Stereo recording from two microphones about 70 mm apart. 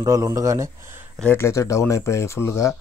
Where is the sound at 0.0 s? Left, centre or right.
Right.